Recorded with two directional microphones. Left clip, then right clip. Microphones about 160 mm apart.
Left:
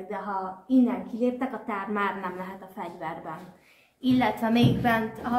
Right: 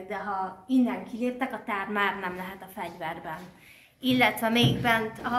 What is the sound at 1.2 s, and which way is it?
A woman's voice, 60° right (ahead or behind).